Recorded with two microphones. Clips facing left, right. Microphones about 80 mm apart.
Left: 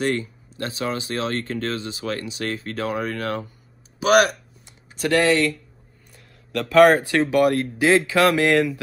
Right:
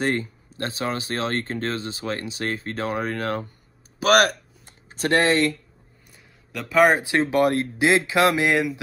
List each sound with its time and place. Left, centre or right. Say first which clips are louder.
0.0 s speech: left 1 dB; right
6.1 s a sound: left 7 dB; centre
7.0 s speech: left 2 dB; right